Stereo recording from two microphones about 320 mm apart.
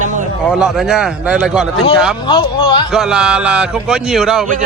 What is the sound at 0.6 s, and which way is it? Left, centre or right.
Speech, centre.